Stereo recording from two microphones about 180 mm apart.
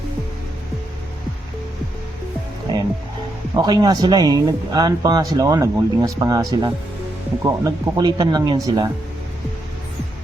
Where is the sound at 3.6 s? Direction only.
20° right (ahead or behind).